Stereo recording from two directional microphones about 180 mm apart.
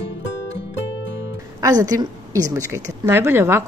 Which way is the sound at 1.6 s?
20° right (ahead or behind).